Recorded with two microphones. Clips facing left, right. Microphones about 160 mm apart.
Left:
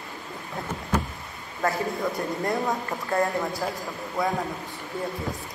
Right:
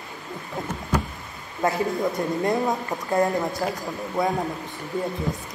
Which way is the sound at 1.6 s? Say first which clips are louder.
Right 3 dB; 20° right (ahead or behind).